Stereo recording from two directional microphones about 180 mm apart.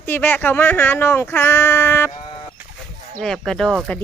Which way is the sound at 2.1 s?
25° left (ahead or behind).